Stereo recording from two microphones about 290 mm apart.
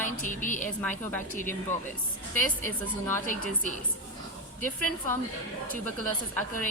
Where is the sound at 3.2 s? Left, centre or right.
Left.